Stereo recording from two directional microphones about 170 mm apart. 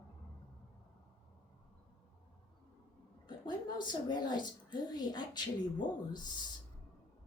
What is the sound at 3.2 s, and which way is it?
A woman's voice, 25° left (ahead or behind).